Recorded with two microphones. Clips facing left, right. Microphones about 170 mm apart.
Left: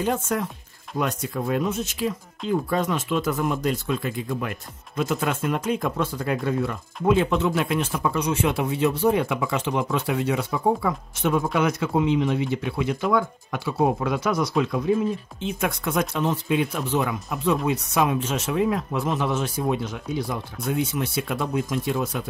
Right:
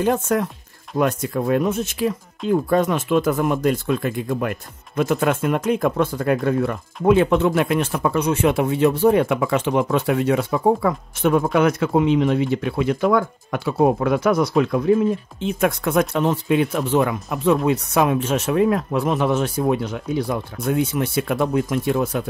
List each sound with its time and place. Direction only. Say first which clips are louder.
0.0 s speech: right 5 dB; 55° right (ahead or behind)